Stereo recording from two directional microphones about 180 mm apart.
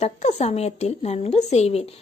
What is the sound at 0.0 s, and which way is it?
Speech, 35° left (ahead or behind).